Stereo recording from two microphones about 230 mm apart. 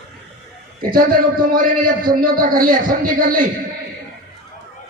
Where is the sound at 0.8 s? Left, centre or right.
Right.